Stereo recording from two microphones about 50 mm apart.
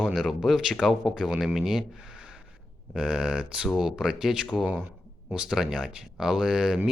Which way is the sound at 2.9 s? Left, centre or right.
Centre.